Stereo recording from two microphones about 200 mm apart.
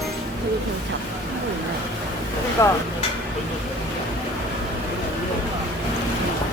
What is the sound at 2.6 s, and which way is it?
Speech, 15° left (ahead or behind).